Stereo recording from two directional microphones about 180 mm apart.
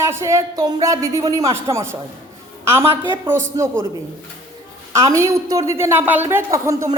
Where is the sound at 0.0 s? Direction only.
15° right (ahead or behind).